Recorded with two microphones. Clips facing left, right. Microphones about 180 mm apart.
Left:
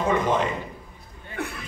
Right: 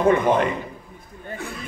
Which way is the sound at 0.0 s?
55° right (ahead or behind).